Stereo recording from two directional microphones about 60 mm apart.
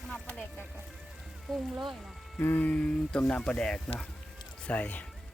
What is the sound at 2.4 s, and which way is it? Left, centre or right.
Music, left.